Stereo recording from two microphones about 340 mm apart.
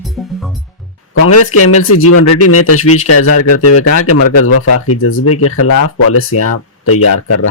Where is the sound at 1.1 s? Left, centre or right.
Left.